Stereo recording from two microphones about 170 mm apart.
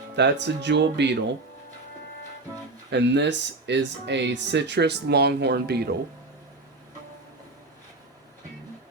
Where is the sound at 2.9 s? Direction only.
90° right; by 6.0 s 75° right (ahead or behind).